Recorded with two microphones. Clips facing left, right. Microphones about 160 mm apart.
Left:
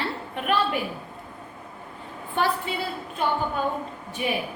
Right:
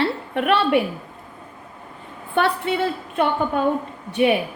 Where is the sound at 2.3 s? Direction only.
70° right (ahead or behind).